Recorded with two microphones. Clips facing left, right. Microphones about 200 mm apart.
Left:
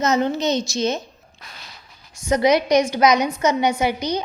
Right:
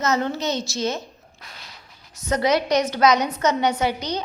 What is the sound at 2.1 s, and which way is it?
A woman's voice, 10° left (ahead or behind).